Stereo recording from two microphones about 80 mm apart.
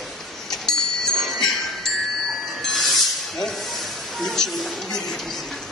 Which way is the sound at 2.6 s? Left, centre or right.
Centre.